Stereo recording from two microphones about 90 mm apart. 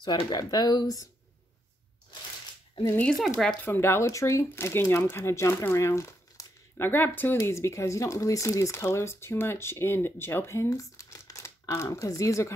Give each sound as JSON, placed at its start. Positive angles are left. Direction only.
{"t": 0.0, "sound": "speech", "side_deg": 55}
{"t": 3.0, "sound": "speech", "side_deg": 5}
{"t": 3.6, "sound": "speech", "side_deg": 25}
{"t": 6.9, "sound": "speech", "side_deg": 20}